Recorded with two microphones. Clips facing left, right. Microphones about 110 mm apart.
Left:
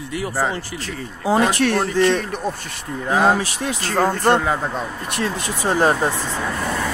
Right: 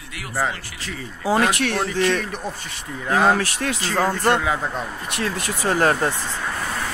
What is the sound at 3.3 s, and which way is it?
Speech, 15° left (ahead or behind).